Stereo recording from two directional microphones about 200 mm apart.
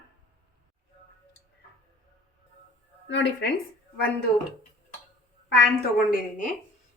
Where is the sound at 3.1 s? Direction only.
60° left (ahead or behind).